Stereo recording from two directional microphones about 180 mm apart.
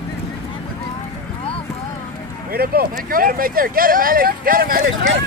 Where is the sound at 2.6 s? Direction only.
55° right (ahead or behind).